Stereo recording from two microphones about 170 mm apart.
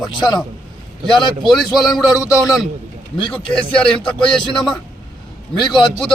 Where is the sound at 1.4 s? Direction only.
Centre (ahead or behind).